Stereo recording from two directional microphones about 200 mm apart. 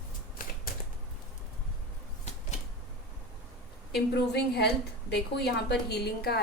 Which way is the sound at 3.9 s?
55° left (ahead or behind).